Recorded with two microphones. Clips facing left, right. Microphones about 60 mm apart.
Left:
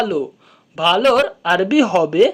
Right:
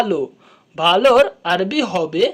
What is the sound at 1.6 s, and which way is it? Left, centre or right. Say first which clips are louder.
Speech: left 5 dB; centre.